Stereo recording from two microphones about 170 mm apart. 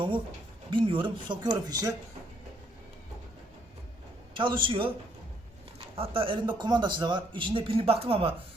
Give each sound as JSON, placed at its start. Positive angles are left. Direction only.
{"t": 0.7, "sound": "speech", "side_deg": -30}
{"t": 4.4, "sound": "speech", "side_deg": -30}
{"t": 6.0, "sound": "speech", "side_deg": -30}